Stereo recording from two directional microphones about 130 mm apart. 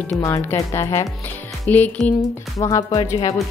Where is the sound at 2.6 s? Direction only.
25° left (ahead or behind).